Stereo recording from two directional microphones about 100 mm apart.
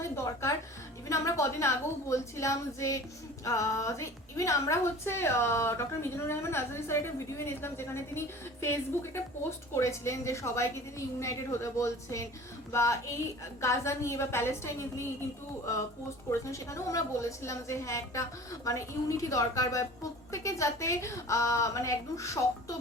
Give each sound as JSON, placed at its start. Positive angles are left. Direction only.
{"t": 0.2, "sound": "music", "side_deg": 30}
{"t": 1.0, "sound": "a woman's voice", "side_deg": 30}
{"t": 16.3, "sound": "a woman's voice", "side_deg": 30}